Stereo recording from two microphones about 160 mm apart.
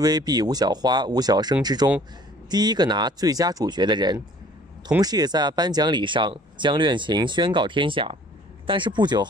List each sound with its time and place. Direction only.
0.0 s speech: 25° right (ahead or behind)